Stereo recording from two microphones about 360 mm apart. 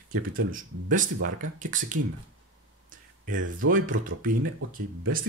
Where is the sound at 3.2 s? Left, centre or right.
Right.